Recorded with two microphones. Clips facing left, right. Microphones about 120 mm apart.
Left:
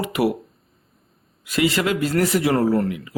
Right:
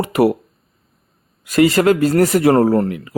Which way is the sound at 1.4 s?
45° right (ahead or behind).